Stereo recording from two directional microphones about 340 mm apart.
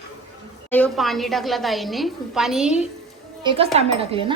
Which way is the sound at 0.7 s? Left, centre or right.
Centre.